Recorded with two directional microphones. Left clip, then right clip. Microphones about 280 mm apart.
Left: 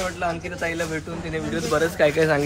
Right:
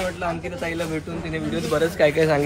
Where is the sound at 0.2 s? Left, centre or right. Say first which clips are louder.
Left 1 dB; centre.